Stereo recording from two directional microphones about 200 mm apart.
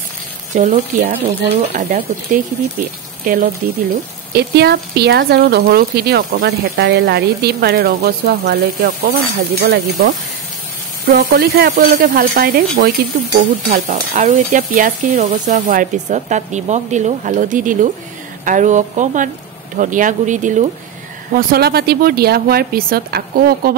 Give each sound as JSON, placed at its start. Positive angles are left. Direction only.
{"t": 0.6, "sound": "stir", "side_deg": -40}
{"t": 1.9, "sound": "speech", "side_deg": -45}
{"t": 13.4, "sound": "stir", "side_deg": -45}
{"t": 21.3, "sound": "speech", "side_deg": -45}